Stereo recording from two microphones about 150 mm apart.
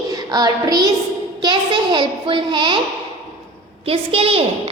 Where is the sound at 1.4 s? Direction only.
30° right (ahead or behind).